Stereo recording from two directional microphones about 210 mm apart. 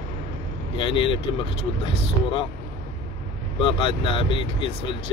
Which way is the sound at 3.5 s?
25° left (ahead or behind).